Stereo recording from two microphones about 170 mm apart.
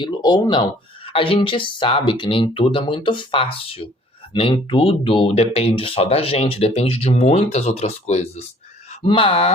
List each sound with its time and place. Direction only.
0.0 s speech: 25° left (ahead or behind)